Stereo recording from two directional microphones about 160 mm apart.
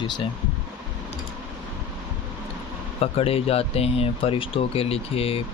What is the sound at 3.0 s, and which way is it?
Speech, 35° left (ahead or behind).